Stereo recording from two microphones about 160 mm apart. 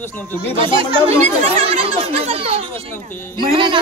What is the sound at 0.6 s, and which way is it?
A child's voice, 35° right (ahead or behind).